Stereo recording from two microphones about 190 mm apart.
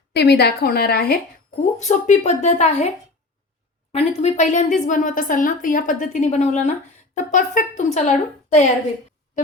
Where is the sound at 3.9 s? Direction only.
35° left (ahead or behind).